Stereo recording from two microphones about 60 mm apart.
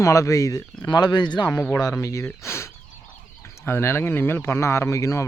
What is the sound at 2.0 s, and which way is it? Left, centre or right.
Speech, left.